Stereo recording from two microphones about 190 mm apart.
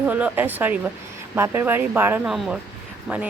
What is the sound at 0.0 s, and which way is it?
Speech, 10° right (ahead or behind).